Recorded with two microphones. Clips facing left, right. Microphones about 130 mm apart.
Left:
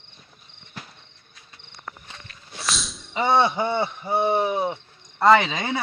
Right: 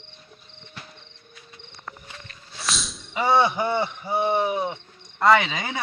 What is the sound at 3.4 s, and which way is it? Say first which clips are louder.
Speech: even; 25° left (ahead or behind).